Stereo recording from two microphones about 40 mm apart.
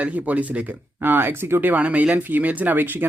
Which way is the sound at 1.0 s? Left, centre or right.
Right.